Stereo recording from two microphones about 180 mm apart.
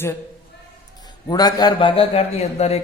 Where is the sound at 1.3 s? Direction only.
20° left (ahead or behind).